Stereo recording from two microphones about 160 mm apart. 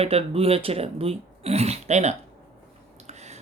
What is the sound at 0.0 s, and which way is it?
Speech, 40° right (ahead or behind).